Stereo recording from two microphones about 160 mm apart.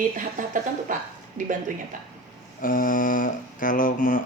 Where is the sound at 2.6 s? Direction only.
60° left (ahead or behind).